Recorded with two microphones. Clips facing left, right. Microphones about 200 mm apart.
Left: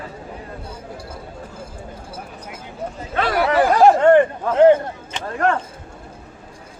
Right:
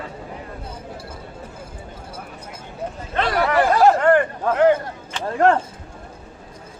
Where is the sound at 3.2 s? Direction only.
5° left (ahead or behind).